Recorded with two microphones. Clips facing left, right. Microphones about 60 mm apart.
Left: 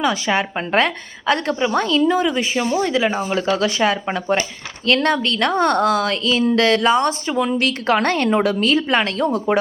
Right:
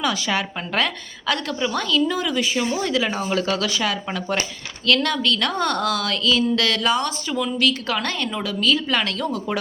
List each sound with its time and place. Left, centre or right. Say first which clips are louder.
0.0 s a woman's voice: left 4 dB; left